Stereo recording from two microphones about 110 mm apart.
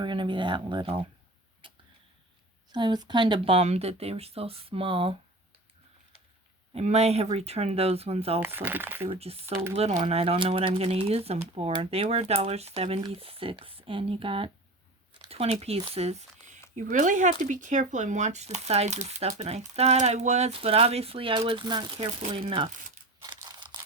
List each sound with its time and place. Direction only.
0.0 s speech: 45° right (ahead or behind)
1.6 s arrow: 50° right (ahead or behind)
2.7 s speech: 40° right (ahead or behind)
6.7 s speech: 75° right (ahead or behind)
8.4 s speech: 20° right (ahead or behind)
9.0 s speech: 65° right (ahead or behind)
15.3 s a sound: 65° right (ahead or behind)
16.0 s a sound: 80° right
17.0 s speech: 90° right; by 21.6 s 55° right (ahead or behind)
21.6 s speech: 40° right (ahead or behind)
22.4 s speech: 50° right (ahead or behind)
23.2 s crushing: 40° right (ahead or behind)